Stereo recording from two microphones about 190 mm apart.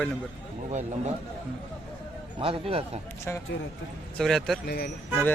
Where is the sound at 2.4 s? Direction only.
30° right (ahead or behind).